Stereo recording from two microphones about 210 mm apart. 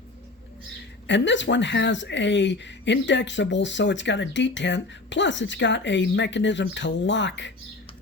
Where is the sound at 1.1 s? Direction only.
60° left (ahead or behind).